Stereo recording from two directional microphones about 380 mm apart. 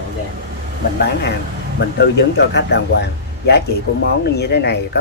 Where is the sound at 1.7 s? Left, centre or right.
Left.